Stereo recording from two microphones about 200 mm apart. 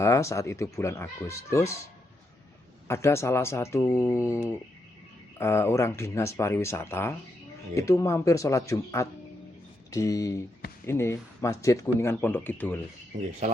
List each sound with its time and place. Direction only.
0.0 s speech: 15° left (ahead or behind)
2.8 s speech: 15° left (ahead or behind)
13.1 s speech: 40° right (ahead or behind)